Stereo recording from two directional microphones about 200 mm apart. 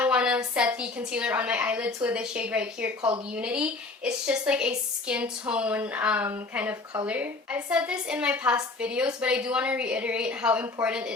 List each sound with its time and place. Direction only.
0.0 s a woman's voice: 5° right (ahead or behind)